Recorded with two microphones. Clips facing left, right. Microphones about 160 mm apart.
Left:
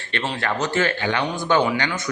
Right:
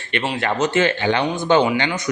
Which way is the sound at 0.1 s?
20° right (ahead or behind).